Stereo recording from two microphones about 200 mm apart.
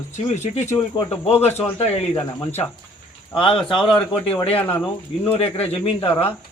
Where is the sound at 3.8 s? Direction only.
25° left (ahead or behind).